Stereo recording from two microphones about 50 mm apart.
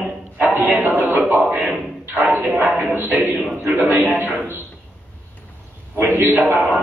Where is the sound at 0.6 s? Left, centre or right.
Right.